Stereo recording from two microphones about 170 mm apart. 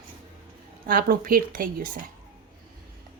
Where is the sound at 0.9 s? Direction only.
55° right (ahead or behind).